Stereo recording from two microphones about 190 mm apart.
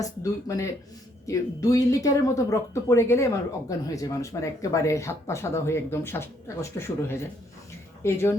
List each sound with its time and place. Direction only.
0.0 s speech: 15° left (ahead or behind)